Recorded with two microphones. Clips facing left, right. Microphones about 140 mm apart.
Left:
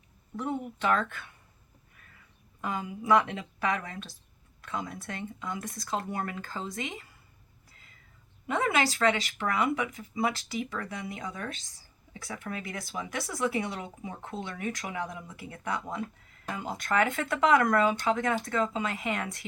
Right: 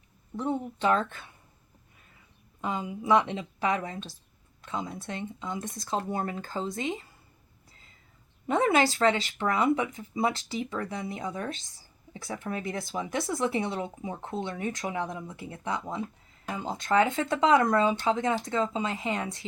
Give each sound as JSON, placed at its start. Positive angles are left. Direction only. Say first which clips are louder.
{"t": 0.3, "sound": "speech", "louder": "right 3 dB", "side_deg": -25}
{"t": 2.6, "sound": "speech", "louder": "right 2 dB", "side_deg": -25}
{"t": 7.7, "sound": "whispering", "louder": "right 1 dB", "side_deg": -25}
{"t": 8.4, "sound": "speech", "louder": "right 4 dB", "side_deg": -25}